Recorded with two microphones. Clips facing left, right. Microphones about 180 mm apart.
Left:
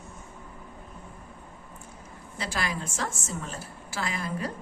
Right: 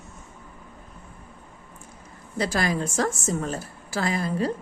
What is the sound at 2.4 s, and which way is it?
Speech, 40° right (ahead or behind).